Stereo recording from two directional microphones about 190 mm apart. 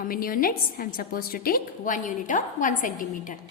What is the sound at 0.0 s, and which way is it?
A woman's voice, 50° left (ahead or behind).